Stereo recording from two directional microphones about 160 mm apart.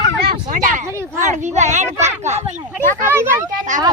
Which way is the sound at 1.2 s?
50° right (ahead or behind).